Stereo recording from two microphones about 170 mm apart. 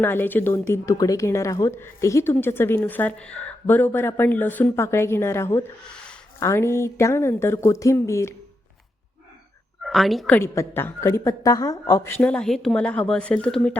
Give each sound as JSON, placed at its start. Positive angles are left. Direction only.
{"t": 0.0, "sound": "speech", "side_deg": 10}
{"t": 9.8, "sound": "a woman's voice", "side_deg": 0}
{"t": 10.3, "sound": "speech", "side_deg": 15}